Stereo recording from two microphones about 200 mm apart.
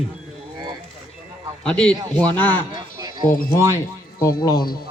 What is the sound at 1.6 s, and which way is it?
A man's voice, 5° left (ahead or behind).